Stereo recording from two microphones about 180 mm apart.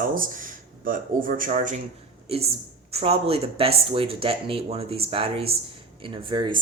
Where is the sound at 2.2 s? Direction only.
35° right (ahead or behind).